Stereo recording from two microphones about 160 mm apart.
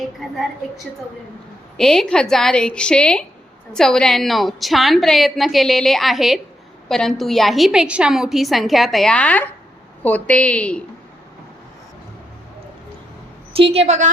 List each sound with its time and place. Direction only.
1.7 s a woman's voice: 5° left (ahead or behind)
13.5 s a woman's voice: 35° right (ahead or behind)